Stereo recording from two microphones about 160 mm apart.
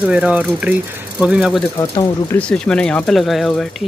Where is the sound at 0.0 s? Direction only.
10° right (ahead or behind).